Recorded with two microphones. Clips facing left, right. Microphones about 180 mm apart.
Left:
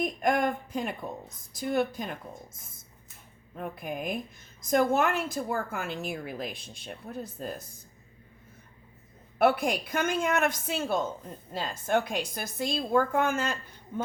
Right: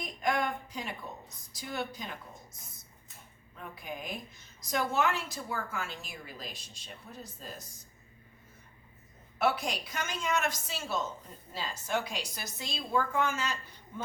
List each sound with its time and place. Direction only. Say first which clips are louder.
0.0 s a woman's voice: left 5 dB; 50° left (ahead or behind)
3.6 s a woman's voice: left 7 dB; 55° left (ahead or behind)
9.4 s a woman's voice: left 6 dB; 55° left (ahead or behind)